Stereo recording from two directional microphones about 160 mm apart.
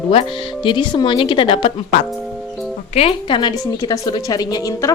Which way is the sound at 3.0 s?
35° left (ahead or behind).